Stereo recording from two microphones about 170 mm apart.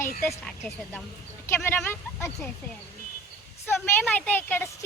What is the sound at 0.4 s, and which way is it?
Speech, centre (ahead or behind).